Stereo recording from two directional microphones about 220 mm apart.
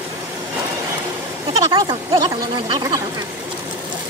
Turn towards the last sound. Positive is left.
turn(degrees=-15)  # may be behind; listen again after turning